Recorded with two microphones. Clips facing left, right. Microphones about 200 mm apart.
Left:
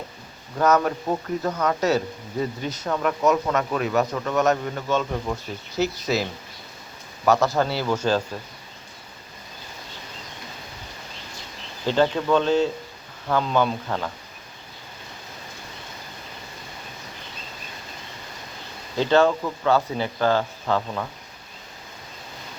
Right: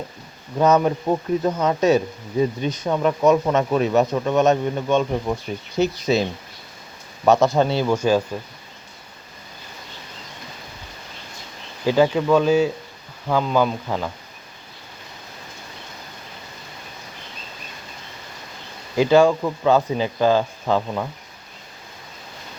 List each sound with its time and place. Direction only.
0.6 s speech: 20° right (ahead or behind)
7.3 s speech: 20° right (ahead or behind)
11.9 s speech: 10° right (ahead or behind)
18.9 s speech: 10° right (ahead or behind)